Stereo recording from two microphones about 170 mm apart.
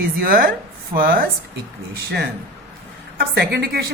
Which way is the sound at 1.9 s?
70° right (ahead or behind).